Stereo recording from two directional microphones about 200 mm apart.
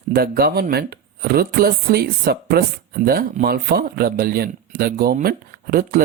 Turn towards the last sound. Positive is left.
turn(degrees=-45)  # may be behind; listen again after turning